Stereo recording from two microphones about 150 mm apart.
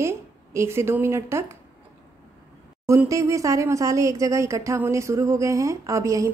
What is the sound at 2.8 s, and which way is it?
Speech, 20° right (ahead or behind).